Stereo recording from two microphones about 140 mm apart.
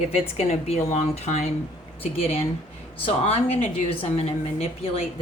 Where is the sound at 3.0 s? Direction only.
45° left (ahead or behind).